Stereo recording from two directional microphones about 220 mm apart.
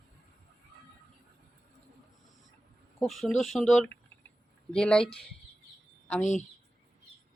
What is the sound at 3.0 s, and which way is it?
Speech, centre (ahead or behind).